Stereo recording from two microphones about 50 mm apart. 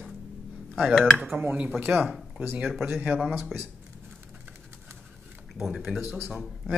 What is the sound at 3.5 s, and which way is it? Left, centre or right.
Speech, centre.